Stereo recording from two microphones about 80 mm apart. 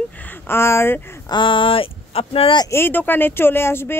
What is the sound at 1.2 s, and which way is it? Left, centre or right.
Speech, left.